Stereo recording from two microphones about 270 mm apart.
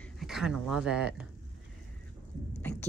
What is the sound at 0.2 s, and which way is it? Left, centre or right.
Speech, centre.